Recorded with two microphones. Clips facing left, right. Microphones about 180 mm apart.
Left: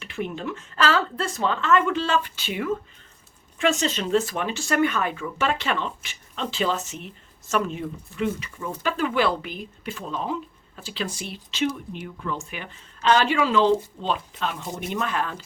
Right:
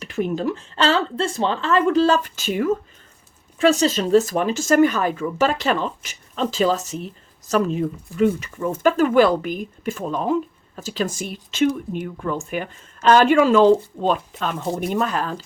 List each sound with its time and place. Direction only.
0.0 s speech: 40° right (ahead or behind)